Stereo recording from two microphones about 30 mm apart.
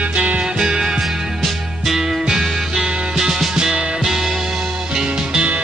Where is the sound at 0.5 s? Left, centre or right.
Centre.